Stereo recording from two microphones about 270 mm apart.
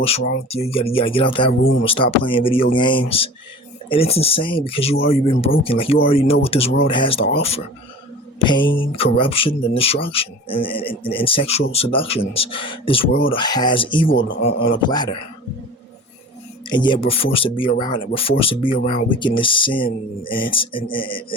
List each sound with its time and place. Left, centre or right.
0.0 s speech: left
8.4 s mantra: centre
8.7 s speech: centre
14.3 s speech: left
14.8 s speech: centre
16.6 s speech: centre